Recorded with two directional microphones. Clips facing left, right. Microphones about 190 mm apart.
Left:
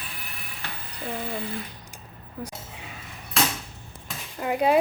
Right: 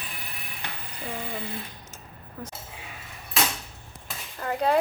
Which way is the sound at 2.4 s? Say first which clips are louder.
Left 3 dB; 10° left (ahead or behind).